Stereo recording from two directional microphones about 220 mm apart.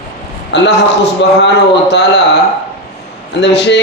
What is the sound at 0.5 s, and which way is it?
A man's voice, 50° left (ahead or behind).